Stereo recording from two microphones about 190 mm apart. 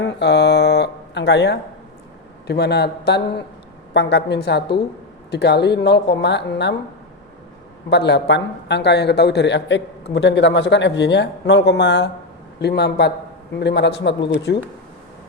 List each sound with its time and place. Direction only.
0.0 s a man's voice: 65° left (ahead or behind)
7.9 s a man's voice: 65° left (ahead or behind)